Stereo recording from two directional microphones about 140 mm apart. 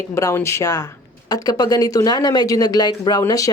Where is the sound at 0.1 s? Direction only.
20° left (ahead or behind).